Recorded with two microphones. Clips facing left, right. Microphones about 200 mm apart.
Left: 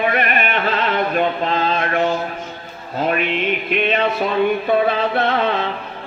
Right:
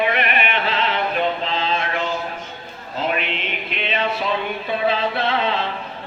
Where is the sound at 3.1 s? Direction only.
50° left (ahead or behind).